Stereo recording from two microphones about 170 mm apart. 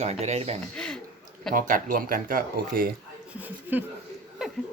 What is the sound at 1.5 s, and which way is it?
Speech, 55° right (ahead or behind).